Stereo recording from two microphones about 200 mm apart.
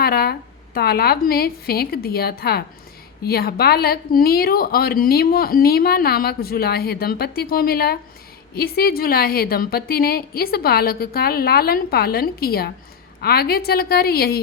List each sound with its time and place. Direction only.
0.0 s a woman's voice: 50° left (ahead or behind)